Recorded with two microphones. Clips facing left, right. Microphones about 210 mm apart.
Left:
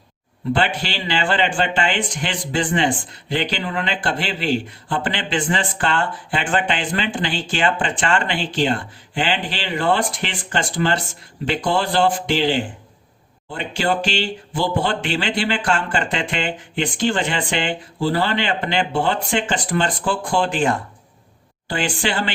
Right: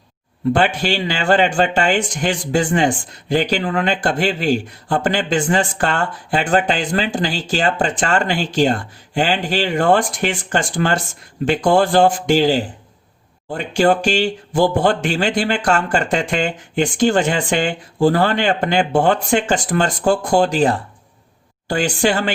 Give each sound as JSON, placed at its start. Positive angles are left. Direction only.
{"t": 0.5, "sound": "speech", "side_deg": -45}